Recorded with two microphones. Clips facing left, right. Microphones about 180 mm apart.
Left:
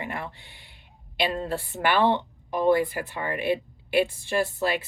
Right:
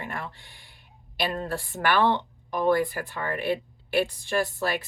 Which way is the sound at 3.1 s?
20° left (ahead or behind).